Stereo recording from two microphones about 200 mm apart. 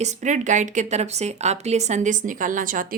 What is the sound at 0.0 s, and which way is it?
A woman's voice, 35° right (ahead or behind).